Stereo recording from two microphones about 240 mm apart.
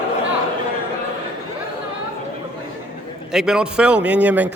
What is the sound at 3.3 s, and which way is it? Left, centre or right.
A man's voice, centre.